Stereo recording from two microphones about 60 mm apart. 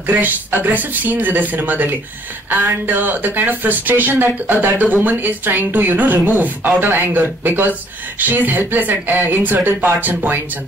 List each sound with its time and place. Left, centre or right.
0.0 s speech: right